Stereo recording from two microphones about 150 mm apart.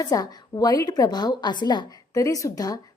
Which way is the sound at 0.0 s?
25° left (ahead or behind).